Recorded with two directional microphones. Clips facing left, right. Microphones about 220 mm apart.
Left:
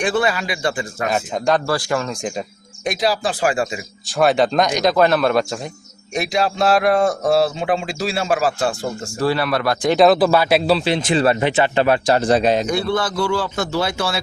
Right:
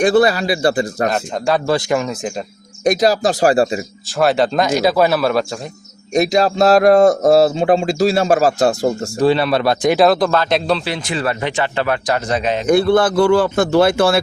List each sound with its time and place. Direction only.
0.0 s speech: 40° right (ahead or behind)
1.1 s speech: 5° right (ahead or behind)
1.6 s speech: 20° right (ahead or behind)
2.8 s speech: 45° right (ahead or behind)
4.2 s speech: centre (ahead or behind)
6.1 s speech: 40° right (ahead or behind)
9.1 s speech: 20° right (ahead or behind)
9.9 s speech: centre (ahead or behind)
10.8 s speech: 25° left (ahead or behind)
12.6 s a man's voice: 55° right (ahead or behind)